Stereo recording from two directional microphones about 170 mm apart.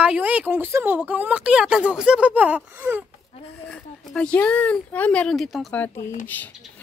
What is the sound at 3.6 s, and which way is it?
A woman's voice, 5° left (ahead or behind).